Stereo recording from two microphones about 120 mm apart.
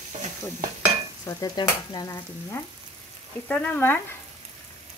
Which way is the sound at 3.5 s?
10° left (ahead or behind).